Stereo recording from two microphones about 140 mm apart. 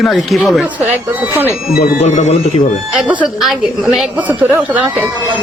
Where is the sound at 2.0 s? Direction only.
55° left (ahead or behind).